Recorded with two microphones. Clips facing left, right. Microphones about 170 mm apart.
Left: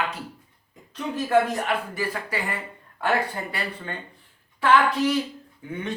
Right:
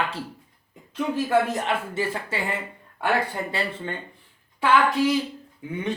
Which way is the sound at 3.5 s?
25° right (ahead or behind).